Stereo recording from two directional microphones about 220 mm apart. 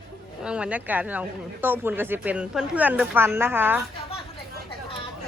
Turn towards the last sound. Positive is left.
turn(degrees=-10)  # may be behind; listen again after turning